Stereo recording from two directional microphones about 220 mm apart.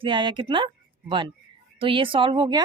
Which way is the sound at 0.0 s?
20° right (ahead or behind).